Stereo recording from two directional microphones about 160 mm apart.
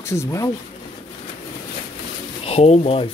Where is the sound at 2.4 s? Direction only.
40° left (ahead or behind).